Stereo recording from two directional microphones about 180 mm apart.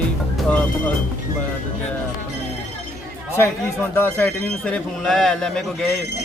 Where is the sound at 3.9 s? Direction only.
10° left (ahead or behind).